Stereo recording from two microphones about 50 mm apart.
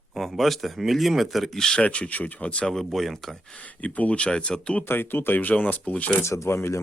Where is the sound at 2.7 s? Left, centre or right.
Centre.